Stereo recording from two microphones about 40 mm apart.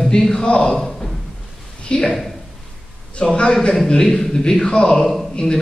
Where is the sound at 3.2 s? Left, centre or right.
Left.